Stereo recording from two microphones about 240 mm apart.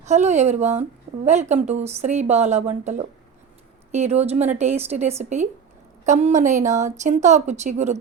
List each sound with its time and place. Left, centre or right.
0.0 s speech: right